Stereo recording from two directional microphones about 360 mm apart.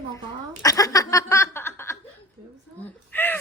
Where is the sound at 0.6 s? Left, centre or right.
Centre.